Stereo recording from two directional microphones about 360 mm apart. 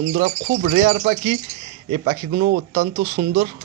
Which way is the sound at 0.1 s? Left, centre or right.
Right.